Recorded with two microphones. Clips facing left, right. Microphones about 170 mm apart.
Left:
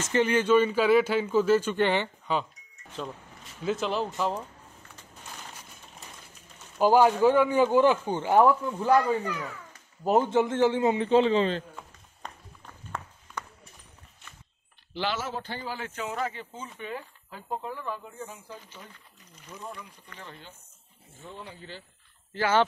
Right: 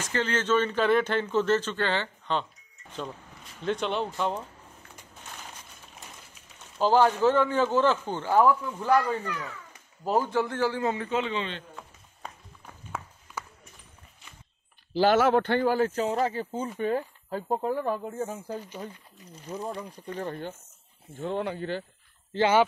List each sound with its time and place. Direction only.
0.0 s speech: 15° left (ahead or behind)
3.6 s speech: centre (ahead or behind)
6.8 s a man's voice: 10° left (ahead or behind)
11.1 s a man's voice: 35° left (ahead or behind)
12.2 s run: 5° right (ahead or behind)
15.1 s a man's voice: 65° right (ahead or behind)
15.8 s speech: 35° right (ahead or behind)
16.6 s speech: 45° right (ahead or behind); by 20.2 s 30° right (ahead or behind)
20.2 s speech: 55° right (ahead or behind)
21.2 s speech: 70° right (ahead or behind)